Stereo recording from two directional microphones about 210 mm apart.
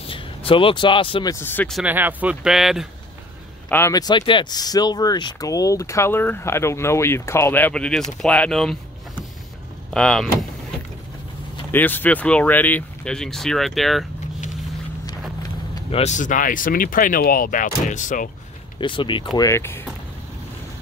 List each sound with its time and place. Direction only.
0.0 s speech: 25° left (ahead or behind)
1.3 s speech: 10° left (ahead or behind)
1.8 s speech: 10° right (ahead or behind)
3.6 s speech: 10° left (ahead or behind)
9.9 s speech: centre (ahead or behind)
11.7 s speech: 10° left (ahead or behind)
15.7 s speech: 30° left (ahead or behind)
18.8 s speech: 25° left (ahead or behind)